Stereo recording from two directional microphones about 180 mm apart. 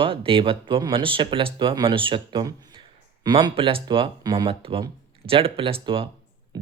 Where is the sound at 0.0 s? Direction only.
30° right (ahead or behind).